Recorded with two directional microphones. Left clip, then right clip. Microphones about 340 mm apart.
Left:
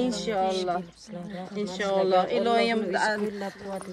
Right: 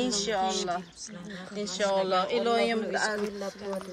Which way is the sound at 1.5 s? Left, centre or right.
Left.